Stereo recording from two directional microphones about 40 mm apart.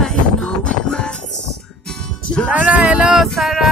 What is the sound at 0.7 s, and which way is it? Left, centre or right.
Music, left.